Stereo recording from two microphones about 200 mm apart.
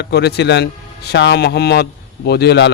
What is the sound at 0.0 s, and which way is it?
Speech, 55° left (ahead or behind).